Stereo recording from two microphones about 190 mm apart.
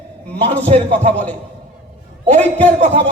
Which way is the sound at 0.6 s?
35° right (ahead or behind).